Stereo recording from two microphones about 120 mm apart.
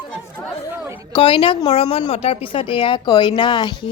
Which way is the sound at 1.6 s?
55° left (ahead or behind).